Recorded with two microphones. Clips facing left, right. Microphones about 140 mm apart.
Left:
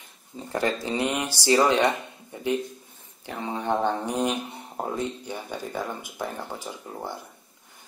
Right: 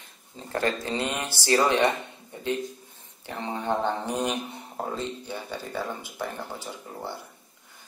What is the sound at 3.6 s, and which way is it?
Speech, 15° left (ahead or behind).